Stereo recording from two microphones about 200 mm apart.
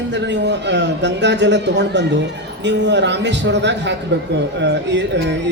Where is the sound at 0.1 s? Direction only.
60° right (ahead or behind).